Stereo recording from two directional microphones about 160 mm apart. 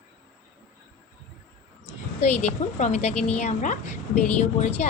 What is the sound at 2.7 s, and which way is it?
A woman's voice, 45° left (ahead or behind).